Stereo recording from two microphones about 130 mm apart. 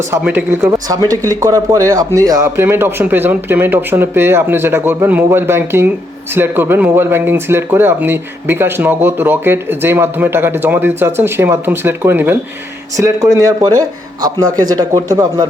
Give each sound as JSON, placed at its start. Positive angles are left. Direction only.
{"t": 0.1, "sound": "a man's voice", "side_deg": -15}